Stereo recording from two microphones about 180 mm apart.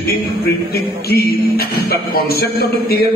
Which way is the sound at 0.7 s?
60° left (ahead or behind).